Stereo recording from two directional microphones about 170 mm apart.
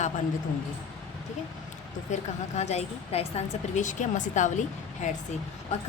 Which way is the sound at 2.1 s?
45° left (ahead or behind).